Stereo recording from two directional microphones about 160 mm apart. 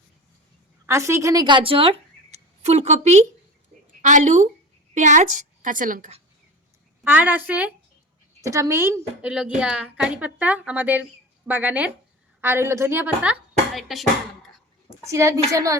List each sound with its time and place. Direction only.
0.9 s a woman's voice: 15° right (ahead or behind); by 6.1 s 55° right (ahead or behind)
7.0 s a woman's voice: 10° right (ahead or behind)
13.7 s music: centre (ahead or behind)
15.0 s a woman's voice: 20° right (ahead or behind)